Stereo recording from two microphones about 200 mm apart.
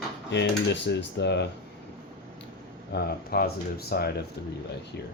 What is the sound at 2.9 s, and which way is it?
Speech, 50° left (ahead or behind).